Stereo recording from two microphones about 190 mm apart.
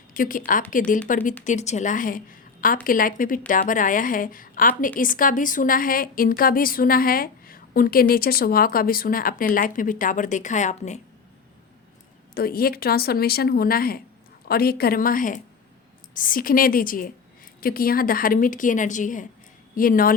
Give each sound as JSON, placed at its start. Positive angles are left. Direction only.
{"t": 0.1, "sound": "a woman's voice", "side_deg": 45}
{"t": 12.3, "sound": "a woman's voice", "side_deg": 50}